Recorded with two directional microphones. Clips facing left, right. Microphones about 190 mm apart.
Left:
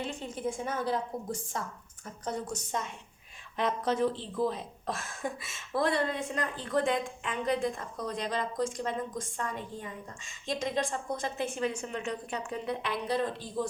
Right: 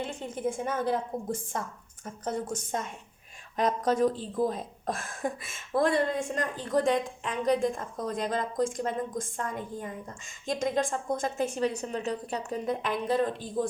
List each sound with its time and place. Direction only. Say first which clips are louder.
0.0 s speech: right 2 dB; 50° right (ahead or behind)